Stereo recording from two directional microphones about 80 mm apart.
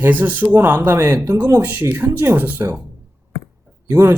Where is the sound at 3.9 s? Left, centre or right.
Right.